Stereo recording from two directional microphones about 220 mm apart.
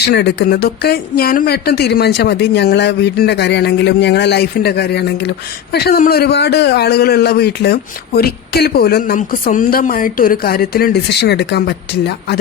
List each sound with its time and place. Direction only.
0.1 s a man's voice: 50° left (ahead or behind)